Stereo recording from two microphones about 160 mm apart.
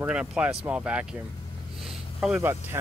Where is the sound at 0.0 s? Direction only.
5° right (ahead or behind).